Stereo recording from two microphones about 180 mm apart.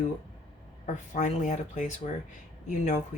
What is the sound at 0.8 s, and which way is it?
Speech, 40° left (ahead or behind).